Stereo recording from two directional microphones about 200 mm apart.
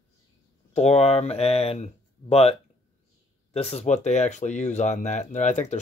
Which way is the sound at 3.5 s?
30° left (ahead or behind).